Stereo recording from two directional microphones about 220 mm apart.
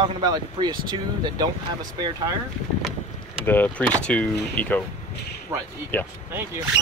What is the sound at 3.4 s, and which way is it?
Speech, 10° left (ahead or behind).